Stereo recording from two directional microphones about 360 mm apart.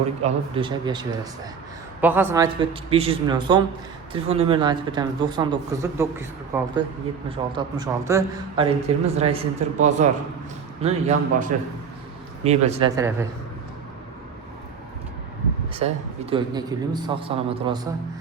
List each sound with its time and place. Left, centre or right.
0.2 s speech: centre
15.7 s speech: centre